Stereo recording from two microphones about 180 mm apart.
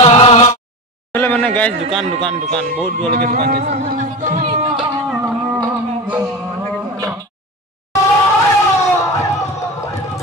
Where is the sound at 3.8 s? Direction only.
45° right (ahead or behind).